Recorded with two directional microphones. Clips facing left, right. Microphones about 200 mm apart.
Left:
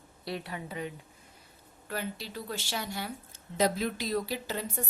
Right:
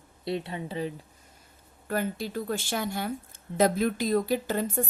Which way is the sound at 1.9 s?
50° right (ahead or behind).